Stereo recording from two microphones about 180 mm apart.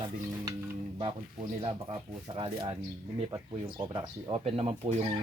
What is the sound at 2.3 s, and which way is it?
Speech, 30° right (ahead or behind).